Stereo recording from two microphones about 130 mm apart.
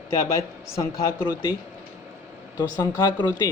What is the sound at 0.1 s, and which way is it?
Speech, 25° left (ahead or behind).